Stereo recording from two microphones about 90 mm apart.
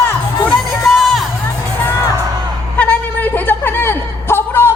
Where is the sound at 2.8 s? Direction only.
15° left (ahead or behind).